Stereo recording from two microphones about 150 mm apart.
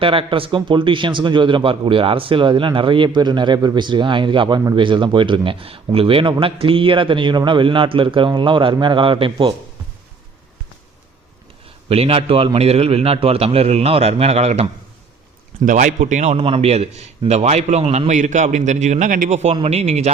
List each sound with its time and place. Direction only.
0.0 s a man's voice: 35° right (ahead or behind)
11.9 s a man's voice: 40° right (ahead or behind)
15.6 s speech: 60° right (ahead or behind)
16.4 s a man's voice: 40° right (ahead or behind)
18.1 s a man's voice: 55° right (ahead or behind)